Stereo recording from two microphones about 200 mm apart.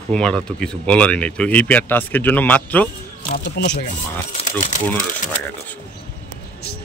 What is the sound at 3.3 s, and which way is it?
Speech, 60° left (ahead or behind).